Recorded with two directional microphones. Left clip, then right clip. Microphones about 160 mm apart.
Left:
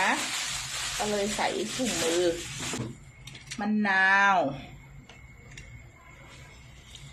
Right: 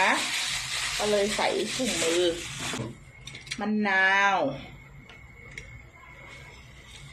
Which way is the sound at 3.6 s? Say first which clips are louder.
Even; 60° left (ahead or behind).